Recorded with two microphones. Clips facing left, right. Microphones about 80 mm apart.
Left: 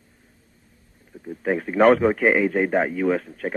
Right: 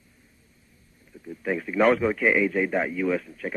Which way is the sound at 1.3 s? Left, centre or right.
Left.